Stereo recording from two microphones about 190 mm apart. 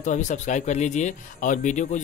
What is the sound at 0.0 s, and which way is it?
Speech, 40° left (ahead or behind).